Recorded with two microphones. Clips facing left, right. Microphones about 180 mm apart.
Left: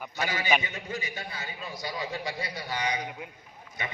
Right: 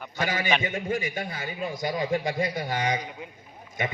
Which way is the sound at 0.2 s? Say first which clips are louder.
Right 2 dB; 50° right (ahead or behind).